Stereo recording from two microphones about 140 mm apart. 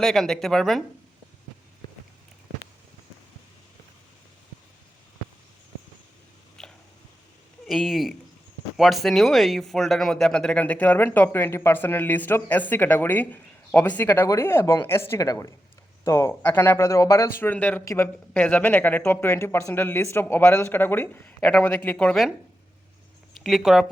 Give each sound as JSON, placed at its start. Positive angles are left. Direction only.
{"t": 0.0, "sound": "a woman's voice", "side_deg": 0}
{"t": 6.6, "sound": "a sound", "side_deg": 5}
{"t": 7.7, "sound": "a woman's voice", "side_deg": 0}
{"t": 18.3, "sound": "speech", "side_deg": 10}
{"t": 23.3, "sound": "speech", "side_deg": 0}